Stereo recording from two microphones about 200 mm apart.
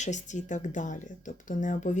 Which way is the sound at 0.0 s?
35° left (ahead or behind).